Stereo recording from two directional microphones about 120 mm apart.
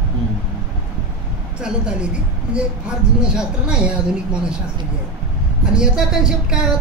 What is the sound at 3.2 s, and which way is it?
Speech, 5° right (ahead or behind).